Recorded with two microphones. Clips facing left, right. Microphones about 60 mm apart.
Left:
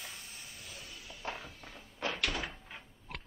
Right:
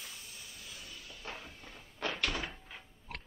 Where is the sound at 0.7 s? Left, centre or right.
Left.